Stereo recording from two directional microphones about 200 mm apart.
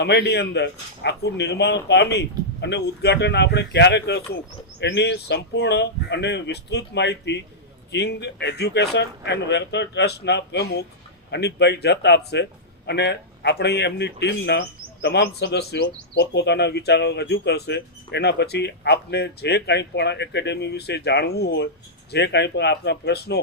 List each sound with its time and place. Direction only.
0.0 s speech: 55° left (ahead or behind)